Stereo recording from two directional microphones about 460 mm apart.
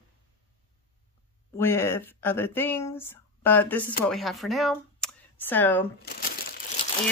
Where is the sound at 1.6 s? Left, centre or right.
Centre.